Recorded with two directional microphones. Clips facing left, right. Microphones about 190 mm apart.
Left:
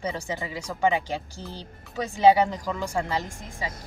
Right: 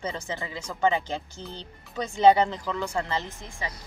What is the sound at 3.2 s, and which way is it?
Speech, 45° left (ahead or behind).